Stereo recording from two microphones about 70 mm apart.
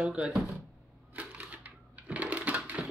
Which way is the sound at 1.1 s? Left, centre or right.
Right.